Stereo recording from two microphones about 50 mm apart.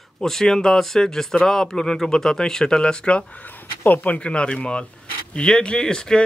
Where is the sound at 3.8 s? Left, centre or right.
Left.